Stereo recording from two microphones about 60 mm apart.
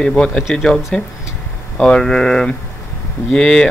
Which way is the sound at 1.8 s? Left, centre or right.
Centre.